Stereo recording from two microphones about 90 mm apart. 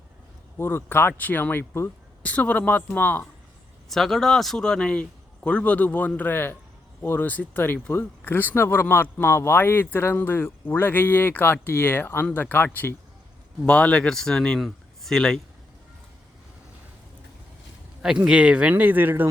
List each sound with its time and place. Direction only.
0.5 s speech: 25° left (ahead or behind)
3.8 s speech: 5° left (ahead or behind)
18.3 s speech: 10° right (ahead or behind)